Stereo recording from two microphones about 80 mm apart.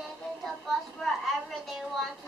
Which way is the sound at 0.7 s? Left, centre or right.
Centre.